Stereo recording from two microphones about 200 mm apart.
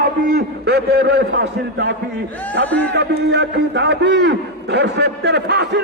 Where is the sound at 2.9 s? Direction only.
60° right (ahead or behind).